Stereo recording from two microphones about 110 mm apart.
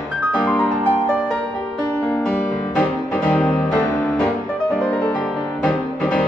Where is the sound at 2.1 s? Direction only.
10° left (ahead or behind).